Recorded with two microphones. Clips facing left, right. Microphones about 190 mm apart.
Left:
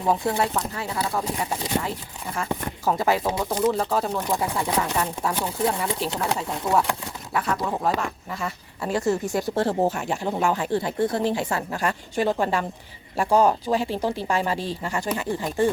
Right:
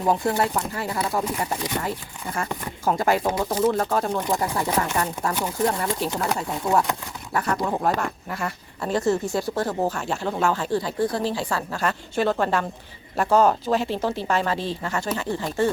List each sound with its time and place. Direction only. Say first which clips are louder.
0.0 s speech: right 1 dB; 5° right (ahead or behind)
2.8 s speech: right 1 dB; centre (ahead or behind)
8.8 s speech: right 1 dB; 10° left (ahead or behind)
9.6 s speech: left 2 dB; 25° left (ahead or behind)